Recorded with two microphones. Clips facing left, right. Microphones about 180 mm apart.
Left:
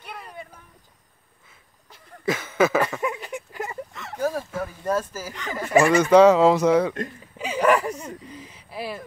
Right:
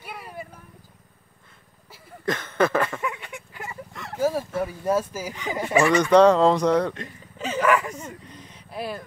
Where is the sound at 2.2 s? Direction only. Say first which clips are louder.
Left 1 dB; 5° left (ahead or behind).